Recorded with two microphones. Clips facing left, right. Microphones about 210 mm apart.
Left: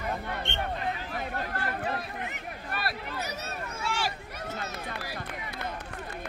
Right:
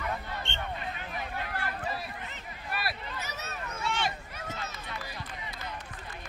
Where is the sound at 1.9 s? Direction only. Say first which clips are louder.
Left 4 dB; 60° left (ahead or behind).